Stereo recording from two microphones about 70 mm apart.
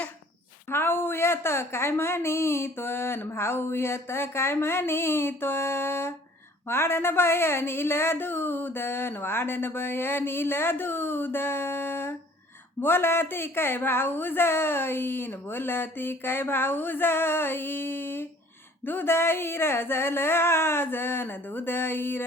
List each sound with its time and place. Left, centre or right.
0.7 s speech: left